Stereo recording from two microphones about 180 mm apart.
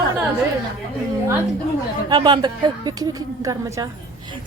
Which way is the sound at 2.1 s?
25° right (ahead or behind).